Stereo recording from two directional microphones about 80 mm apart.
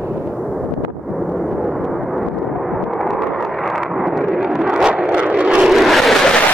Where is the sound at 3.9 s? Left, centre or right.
Centre.